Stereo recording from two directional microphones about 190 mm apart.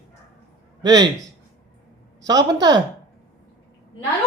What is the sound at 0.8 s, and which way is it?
Speech, 20° right (ahead or behind).